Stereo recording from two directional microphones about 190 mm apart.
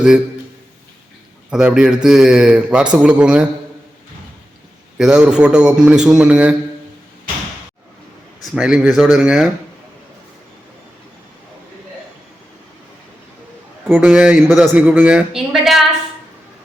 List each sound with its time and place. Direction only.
1.5 s a man's voice: 5° right (ahead or behind)
4.9 s a man's voice: 5° right (ahead or behind)
8.5 s a man's voice: 5° right (ahead or behind)
13.9 s speech: 5° right (ahead or behind)